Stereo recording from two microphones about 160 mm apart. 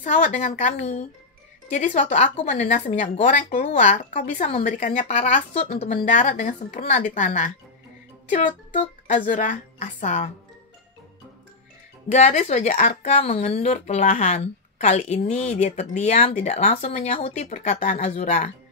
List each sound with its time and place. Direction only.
0.0 s a woman's voice: 45° left (ahead or behind)
9.0 s a woman's voice: 50° left (ahead or behind)
12.1 s a woman's voice: 45° left (ahead or behind)